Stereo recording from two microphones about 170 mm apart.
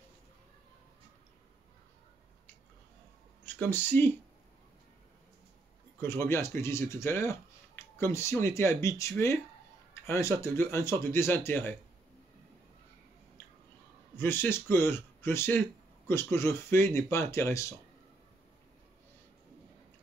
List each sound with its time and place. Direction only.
3.4 s speech: 10° left (ahead or behind)
5.9 s speech: 15° left (ahead or behind)
14.1 s speech: 15° left (ahead or behind)